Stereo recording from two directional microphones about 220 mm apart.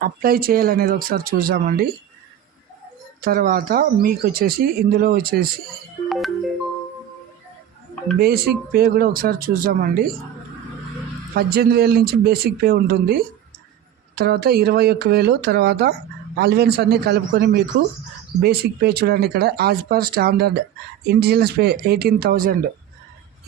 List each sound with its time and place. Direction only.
0.0 s speech: 40° right (ahead or behind)
3.2 s speech: 40° right (ahead or behind)
6.1 s music: centre (ahead or behind)
8.2 s speech: 45° right (ahead or behind)
11.3 s speech: 45° right (ahead or behind)